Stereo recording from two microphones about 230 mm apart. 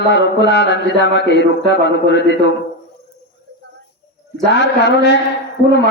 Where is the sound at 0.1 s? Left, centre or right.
Left.